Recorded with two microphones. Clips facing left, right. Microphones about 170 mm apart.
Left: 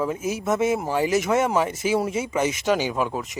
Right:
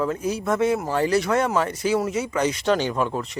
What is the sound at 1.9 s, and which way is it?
Speech, 25° left (ahead or behind).